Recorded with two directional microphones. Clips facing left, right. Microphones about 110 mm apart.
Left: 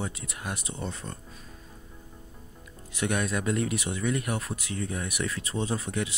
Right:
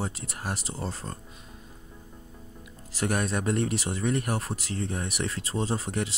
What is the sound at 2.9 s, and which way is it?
Speech, 35° right (ahead or behind).